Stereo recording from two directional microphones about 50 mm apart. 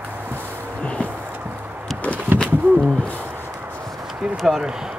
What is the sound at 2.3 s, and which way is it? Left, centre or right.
Bird, right.